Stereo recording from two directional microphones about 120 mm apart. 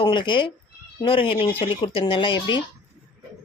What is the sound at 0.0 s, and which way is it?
Speech, 40° left (ahead or behind).